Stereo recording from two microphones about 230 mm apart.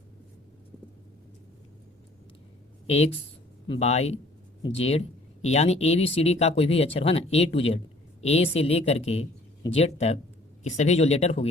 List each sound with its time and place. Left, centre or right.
2.8 s speech: left